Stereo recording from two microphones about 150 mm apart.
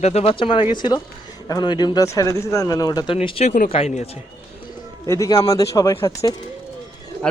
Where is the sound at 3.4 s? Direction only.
65° left (ahead or behind).